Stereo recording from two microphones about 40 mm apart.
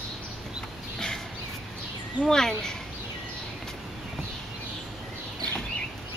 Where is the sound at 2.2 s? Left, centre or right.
Centre.